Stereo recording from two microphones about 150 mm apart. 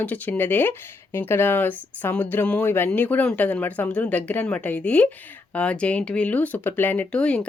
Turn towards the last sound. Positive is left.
turn(degrees=10)  # may be behind; listen again after turning